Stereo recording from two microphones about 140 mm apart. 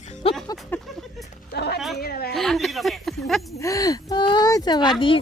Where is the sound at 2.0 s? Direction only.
90° left.